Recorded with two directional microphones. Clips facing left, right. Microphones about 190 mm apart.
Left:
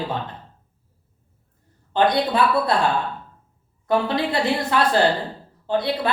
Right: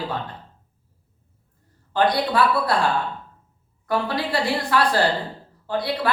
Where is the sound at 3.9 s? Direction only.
20° left (ahead or behind).